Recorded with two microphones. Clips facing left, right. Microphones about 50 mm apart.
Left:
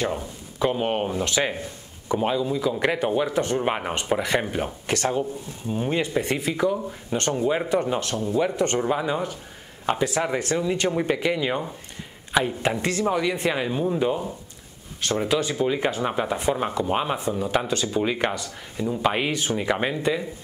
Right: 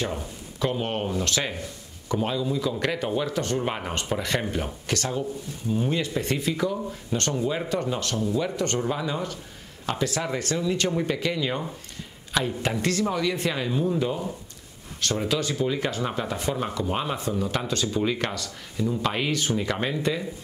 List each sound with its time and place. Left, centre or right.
0.1 s speech: centre